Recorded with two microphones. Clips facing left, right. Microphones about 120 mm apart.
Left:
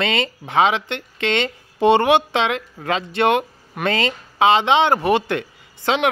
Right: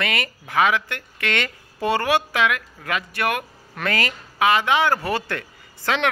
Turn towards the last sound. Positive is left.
turn(degrees=20)  # may be behind; listen again after turning